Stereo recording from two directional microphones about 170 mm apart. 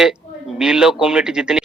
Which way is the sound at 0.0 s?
5° right (ahead or behind).